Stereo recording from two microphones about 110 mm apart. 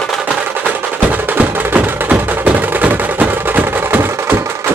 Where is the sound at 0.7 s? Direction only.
15° right (ahead or behind).